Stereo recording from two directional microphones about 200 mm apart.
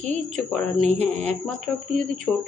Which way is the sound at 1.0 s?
35° right (ahead or behind).